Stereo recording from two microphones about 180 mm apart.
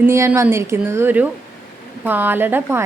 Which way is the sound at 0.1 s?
15° right (ahead or behind).